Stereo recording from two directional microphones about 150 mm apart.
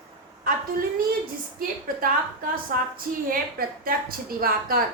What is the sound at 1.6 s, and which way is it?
A woman's voice, 70° right (ahead or behind).